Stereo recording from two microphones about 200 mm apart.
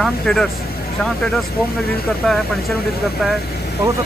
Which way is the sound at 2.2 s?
Centre (ahead or behind).